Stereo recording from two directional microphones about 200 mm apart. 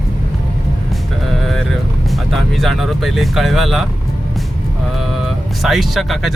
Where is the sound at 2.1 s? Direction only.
Centre (ahead or behind).